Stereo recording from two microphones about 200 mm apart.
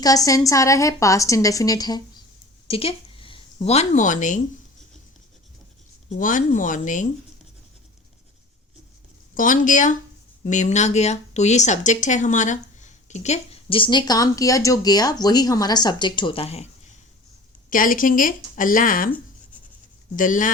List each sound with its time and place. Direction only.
0.0 s a woman's voice: 15° left (ahead or behind)
2.6 s a woman's voice: 30° left (ahead or behind)
6.1 s speech: 40° left (ahead or behind)
9.3 s speech: 40° left (ahead or behind)
17.7 s speech: 45° left (ahead or behind)
20.1 s speech: 40° left (ahead or behind)